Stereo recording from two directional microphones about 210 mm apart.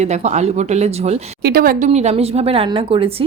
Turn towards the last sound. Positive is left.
turn(degrees=-25)  # may be behind; listen again after turning